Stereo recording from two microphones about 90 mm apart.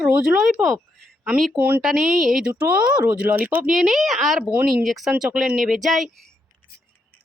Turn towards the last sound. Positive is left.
turn(degrees=0)  # may be behind; listen again after turning